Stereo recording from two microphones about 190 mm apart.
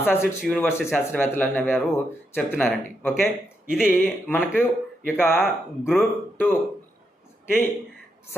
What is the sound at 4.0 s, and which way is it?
A man's voice, 10° left (ahead or behind).